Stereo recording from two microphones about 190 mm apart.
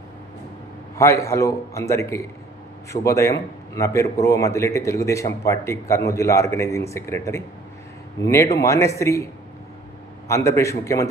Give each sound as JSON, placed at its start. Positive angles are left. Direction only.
{"t": 0.9, "sound": "a man's voice", "side_deg": 15}